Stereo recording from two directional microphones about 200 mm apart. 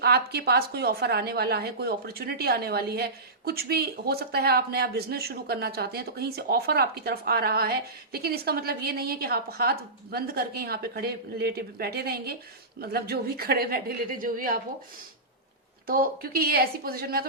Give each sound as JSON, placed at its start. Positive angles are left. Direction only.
{"t": 0.0, "sound": "a woman's voice", "side_deg": -55}
{"t": 15.9, "sound": "a woman's voice", "side_deg": -50}